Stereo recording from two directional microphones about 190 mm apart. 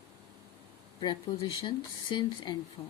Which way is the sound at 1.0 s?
25° left (ahead or behind).